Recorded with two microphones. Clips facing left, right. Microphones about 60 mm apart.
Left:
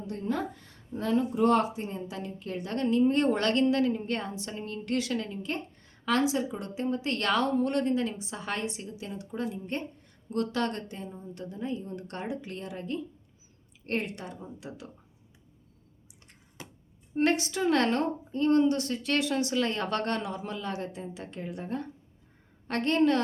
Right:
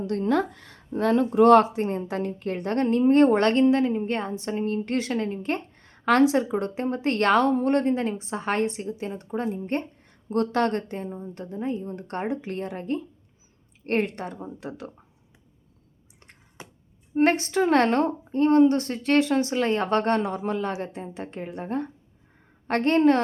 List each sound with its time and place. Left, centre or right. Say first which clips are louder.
0.0 s speech: right 8 dB; right
0.9 s a woman's voice: right 7 dB; right
16.6 s a sound: right 2 dB; right
17.2 s a woman's voice: right 6 dB; right